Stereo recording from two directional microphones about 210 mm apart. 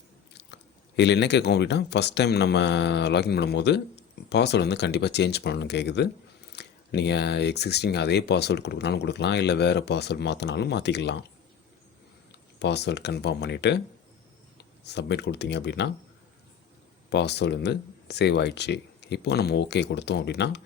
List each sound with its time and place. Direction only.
0.3 s speech: 55° left (ahead or behind)
12.3 s speech: 55° left (ahead or behind)
17.1 s speech: 55° left (ahead or behind)